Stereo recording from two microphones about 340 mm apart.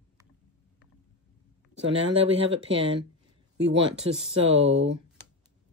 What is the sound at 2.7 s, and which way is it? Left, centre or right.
Speech, centre.